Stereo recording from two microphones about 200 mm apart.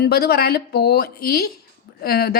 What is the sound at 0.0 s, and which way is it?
Speech, 50° left (ahead or behind).